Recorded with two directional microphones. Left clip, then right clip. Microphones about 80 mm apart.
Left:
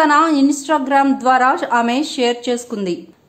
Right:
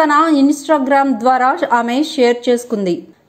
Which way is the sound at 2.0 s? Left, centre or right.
Right.